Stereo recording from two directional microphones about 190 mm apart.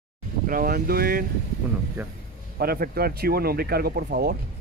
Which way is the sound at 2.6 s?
50° right (ahead or behind).